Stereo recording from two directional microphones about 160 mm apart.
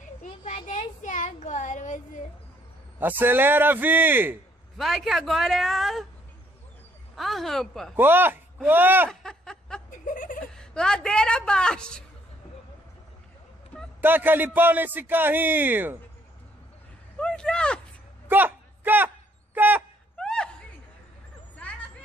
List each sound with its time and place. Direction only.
0.7 s child singing: 50° left (ahead or behind)
3.0 s speech: 10° right (ahead or behind)
4.7 s speech: centre (ahead or behind)
7.2 s speech: centre (ahead or behind)
7.9 s speech: 15° right (ahead or behind)
9.1 s snicker: 5° left (ahead or behind)
9.8 s laughter: 55° left (ahead or behind)
10.5 s a woman's voice: 5° left (ahead or behind)
13.7 s a sound: 10° left (ahead or behind)
14.0 s speech: 10° right (ahead or behind)
17.2 s a sound: 5° left (ahead or behind)
18.3 s a sound: 10° right (ahead or behind)
20.2 s a sound: 5° left (ahead or behind)